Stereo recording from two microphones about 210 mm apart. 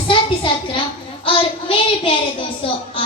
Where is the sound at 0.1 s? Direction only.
25° left (ahead or behind).